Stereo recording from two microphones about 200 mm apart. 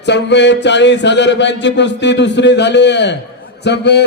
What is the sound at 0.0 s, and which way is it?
Speech, 60° left (ahead or behind).